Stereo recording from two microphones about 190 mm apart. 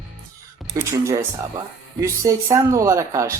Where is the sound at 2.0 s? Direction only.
15° right (ahead or behind).